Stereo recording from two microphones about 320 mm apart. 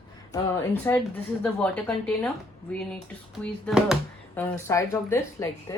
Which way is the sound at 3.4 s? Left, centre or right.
Centre.